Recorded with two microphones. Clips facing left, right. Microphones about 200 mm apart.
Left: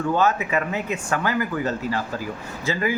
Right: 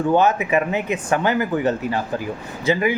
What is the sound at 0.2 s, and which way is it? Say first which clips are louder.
A man's voice: right 4 dB; 20° right (ahead or behind).